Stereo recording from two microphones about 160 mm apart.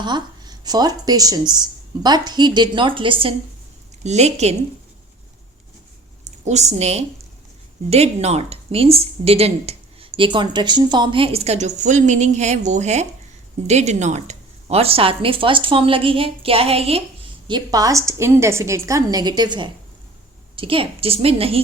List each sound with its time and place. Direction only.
0.0 s speech: 25° right (ahead or behind)
4.0 s a woman's voice: 45° right (ahead or behind)
6.2 s a woman's voice: 45° right (ahead or behind)
17.5 s a woman's voice: 20° right (ahead or behind)